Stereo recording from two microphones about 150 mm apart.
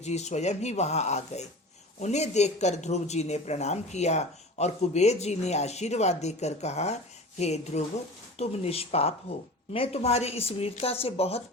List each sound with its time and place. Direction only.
0.0 s speech: 50° left (ahead or behind)